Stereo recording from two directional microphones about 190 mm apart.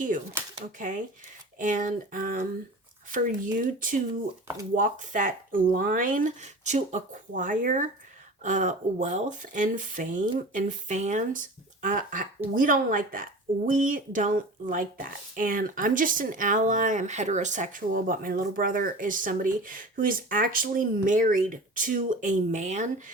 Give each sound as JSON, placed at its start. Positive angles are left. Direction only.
{"t": 0.6, "sound": "speech", "side_deg": -45}